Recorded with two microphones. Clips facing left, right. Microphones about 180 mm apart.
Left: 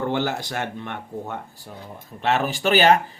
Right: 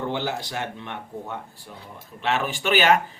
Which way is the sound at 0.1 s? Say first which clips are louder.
Left 3 dB; 55° left (ahead or behind).